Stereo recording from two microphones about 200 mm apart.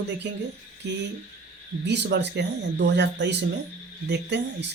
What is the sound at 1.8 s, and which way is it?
Speech, 60° right (ahead or behind).